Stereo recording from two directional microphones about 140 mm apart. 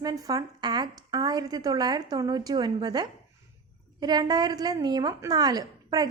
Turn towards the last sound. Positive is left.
turn(degrees=-25)  # may be behind; listen again after turning